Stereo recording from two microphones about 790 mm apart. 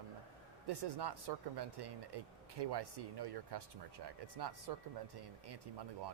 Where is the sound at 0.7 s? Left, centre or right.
Right.